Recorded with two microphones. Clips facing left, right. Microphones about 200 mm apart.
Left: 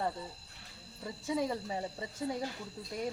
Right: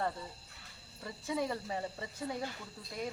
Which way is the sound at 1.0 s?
15° left (ahead or behind).